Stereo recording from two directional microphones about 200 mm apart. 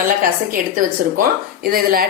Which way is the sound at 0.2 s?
45° right (ahead or behind).